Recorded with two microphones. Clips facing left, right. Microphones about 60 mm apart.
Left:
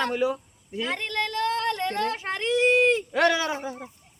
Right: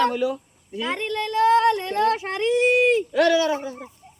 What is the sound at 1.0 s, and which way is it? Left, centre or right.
Speech, centre.